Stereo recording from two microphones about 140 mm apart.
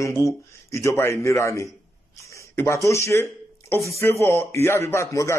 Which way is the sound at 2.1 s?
20° left (ahead or behind).